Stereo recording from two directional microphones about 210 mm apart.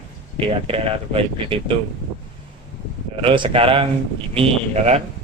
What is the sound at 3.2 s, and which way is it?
Speech, 25° right (ahead or behind).